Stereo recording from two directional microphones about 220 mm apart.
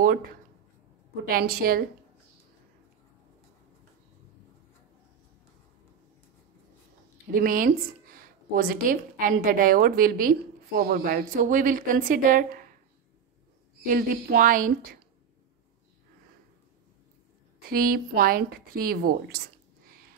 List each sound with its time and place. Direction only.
1.3 s speech: 40° right (ahead or behind)
7.2 s speech: 40° right (ahead or behind)
13.8 s speech: 40° right (ahead or behind)
17.6 s speech: 40° right (ahead or behind)